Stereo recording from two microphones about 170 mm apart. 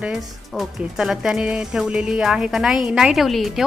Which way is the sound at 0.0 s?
Centre (ahead or behind).